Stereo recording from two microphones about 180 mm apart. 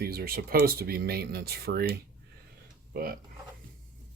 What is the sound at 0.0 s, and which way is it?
Speech, 60° right (ahead or behind).